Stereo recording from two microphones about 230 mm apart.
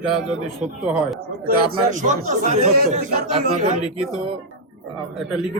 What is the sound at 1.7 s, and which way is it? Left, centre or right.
A man's voice, right.